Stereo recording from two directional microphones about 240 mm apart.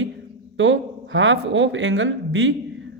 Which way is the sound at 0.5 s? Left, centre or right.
Right.